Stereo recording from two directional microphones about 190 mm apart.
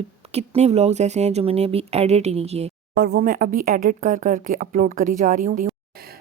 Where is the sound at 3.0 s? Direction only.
55° right (ahead or behind).